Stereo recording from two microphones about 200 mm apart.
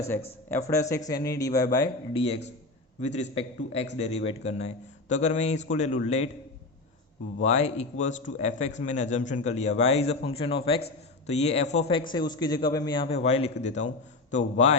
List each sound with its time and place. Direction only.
0.1 s speech: 10° left (ahead or behind)
3.0 s a man's voice: 35° left (ahead or behind)
7.4 s a man's voice: 35° left (ahead or behind)